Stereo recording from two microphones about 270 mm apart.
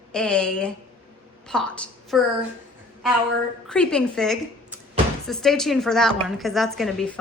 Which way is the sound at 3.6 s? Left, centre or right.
Centre.